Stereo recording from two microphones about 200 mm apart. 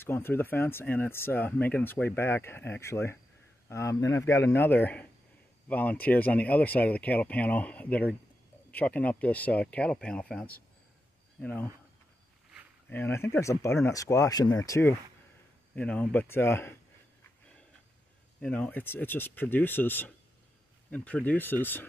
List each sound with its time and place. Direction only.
0.0 s speech: 10° left (ahead or behind)
12.9 s speech: 10° left (ahead or behind)
18.4 s speech: 5° left (ahead or behind)